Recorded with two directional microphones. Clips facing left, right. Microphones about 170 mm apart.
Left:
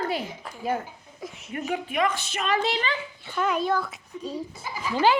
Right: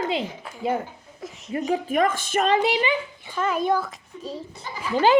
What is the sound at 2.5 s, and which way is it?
Speech, 15° right (ahead or behind).